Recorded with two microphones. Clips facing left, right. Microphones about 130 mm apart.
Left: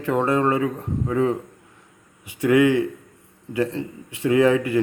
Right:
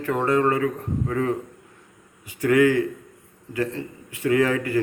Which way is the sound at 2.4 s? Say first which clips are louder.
Left 1 dB; 20° left (ahead or behind).